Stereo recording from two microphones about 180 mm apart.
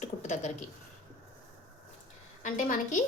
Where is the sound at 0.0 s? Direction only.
40° left (ahead or behind).